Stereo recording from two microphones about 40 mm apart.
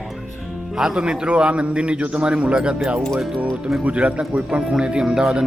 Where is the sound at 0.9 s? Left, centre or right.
Right.